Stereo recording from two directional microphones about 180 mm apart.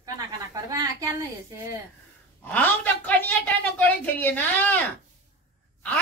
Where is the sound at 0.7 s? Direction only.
20° right (ahead or behind).